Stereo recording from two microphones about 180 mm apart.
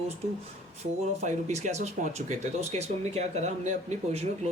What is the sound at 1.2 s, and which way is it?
Speech, 40° right (ahead or behind).